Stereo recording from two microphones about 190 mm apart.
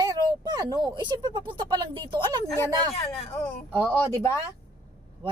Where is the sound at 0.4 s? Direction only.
20° right (ahead or behind).